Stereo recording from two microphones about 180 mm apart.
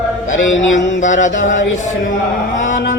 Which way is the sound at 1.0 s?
45° left (ahead or behind).